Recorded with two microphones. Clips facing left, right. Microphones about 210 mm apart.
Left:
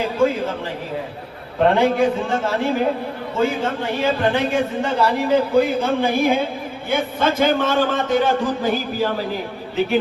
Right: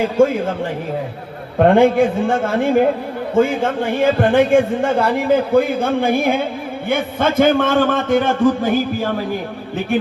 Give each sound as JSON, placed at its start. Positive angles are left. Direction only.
{"t": 0.2, "sound": "speech", "side_deg": -50}
{"t": 1.5, "sound": "speech", "side_deg": -50}